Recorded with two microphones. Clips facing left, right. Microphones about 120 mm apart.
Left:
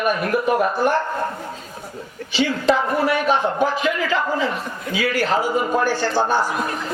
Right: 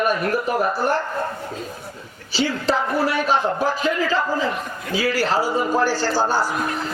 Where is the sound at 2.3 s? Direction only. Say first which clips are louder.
Left 3 dB; 35° right (ahead or behind).